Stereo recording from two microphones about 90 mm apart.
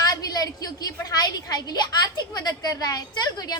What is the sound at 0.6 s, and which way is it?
A woman's voice, 45° left (ahead or behind).